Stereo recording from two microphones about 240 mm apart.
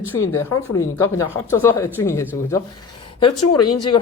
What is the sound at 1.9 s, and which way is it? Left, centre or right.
Speech, centre.